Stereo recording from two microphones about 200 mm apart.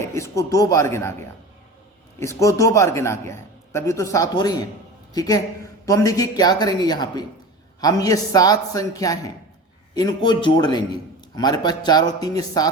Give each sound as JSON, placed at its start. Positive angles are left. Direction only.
{"t": 0.0, "sound": "a man's voice", "side_deg": 15}
{"t": 2.1, "sound": "a man's voice", "side_deg": 15}